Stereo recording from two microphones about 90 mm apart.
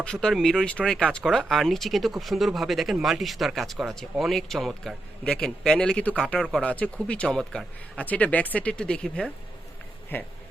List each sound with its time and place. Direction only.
0.0 s speech: 10° left (ahead or behind)
8.0 s speech: 15° left (ahead or behind)
10.1 s speech: 25° left (ahead or behind)